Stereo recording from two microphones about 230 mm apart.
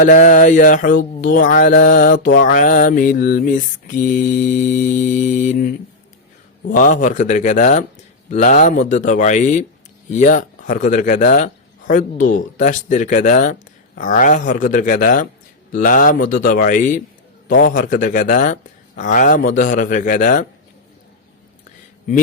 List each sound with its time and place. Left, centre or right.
0.0 s a man's voice: left